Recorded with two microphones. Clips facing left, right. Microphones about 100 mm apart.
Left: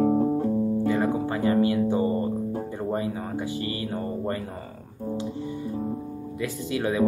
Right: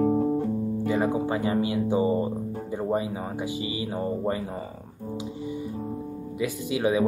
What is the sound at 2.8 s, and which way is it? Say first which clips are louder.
Speech: right 3 dB; 15° right (ahead or behind).